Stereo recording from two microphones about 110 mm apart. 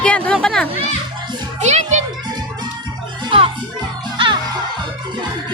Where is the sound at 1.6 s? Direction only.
90° right.